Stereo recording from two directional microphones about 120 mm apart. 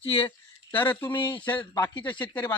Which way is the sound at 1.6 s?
35° left (ahead or behind).